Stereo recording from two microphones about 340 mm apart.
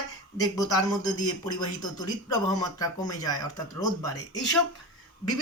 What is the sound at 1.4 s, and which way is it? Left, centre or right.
Speech, centre.